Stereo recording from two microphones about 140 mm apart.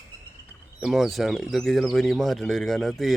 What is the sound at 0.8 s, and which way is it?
Speech, centre (ahead or behind).